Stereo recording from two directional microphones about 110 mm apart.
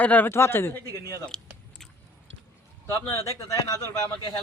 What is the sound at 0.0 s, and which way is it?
A man's voice, 15° left (ahead or behind).